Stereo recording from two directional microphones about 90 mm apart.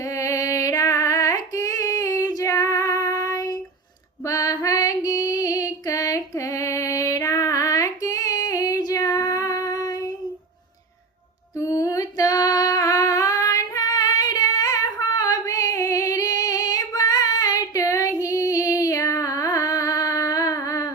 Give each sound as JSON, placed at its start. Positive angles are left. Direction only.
{"t": 0.0, "sound": "music", "side_deg": 35}
{"t": 2.4, "sound": "female singing", "side_deg": 35}
{"t": 11.5, "sound": "female singing", "side_deg": 35}